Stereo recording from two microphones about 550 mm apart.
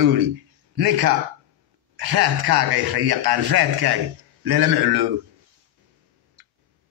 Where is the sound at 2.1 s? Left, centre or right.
Right.